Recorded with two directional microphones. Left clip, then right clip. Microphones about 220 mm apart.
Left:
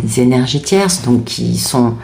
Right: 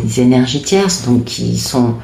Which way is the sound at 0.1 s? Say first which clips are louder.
Right 1 dB; 30° left (ahead or behind).